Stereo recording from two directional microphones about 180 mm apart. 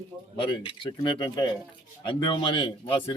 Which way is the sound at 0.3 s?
30° left (ahead or behind).